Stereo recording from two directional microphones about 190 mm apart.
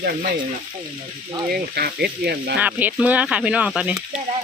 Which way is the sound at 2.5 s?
10° right (ahead or behind).